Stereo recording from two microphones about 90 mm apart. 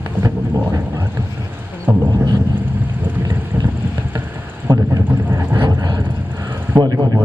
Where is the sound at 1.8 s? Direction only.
20° right (ahead or behind).